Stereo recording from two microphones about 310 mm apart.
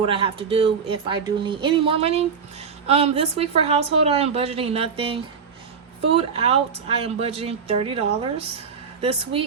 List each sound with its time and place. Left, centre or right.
0.0 s speech: centre